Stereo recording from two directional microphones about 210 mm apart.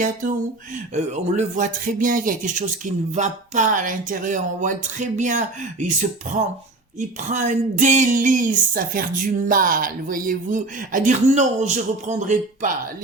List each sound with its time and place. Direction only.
0.0 s speech: 40° right (ahead or behind)
7.3 s speech: 35° right (ahead or behind)